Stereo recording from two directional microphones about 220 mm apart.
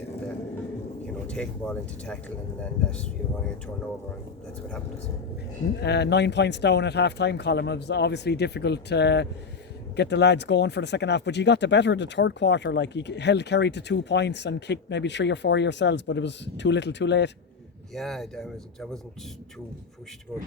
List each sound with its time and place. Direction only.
1.3 s speech: 5° left (ahead or behind)
5.8 s speech: 50° left (ahead or behind)
17.9 s speech: centre (ahead or behind)